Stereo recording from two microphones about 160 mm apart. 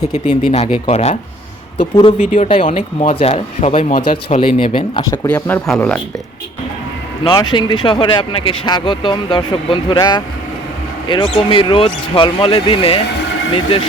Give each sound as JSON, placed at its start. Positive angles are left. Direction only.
{"t": 0.7, "sound": "a man's voice", "side_deg": 40}
{"t": 1.8, "sound": "a man's voice", "side_deg": 30}
{"t": 2.1, "sound": "speech", "side_deg": 50}
{"t": 3.0, "sound": "a man's voice", "side_deg": 40}
{"t": 5.2, "sound": "speech", "side_deg": 15}
{"t": 7.3, "sound": "a man's voice", "side_deg": 30}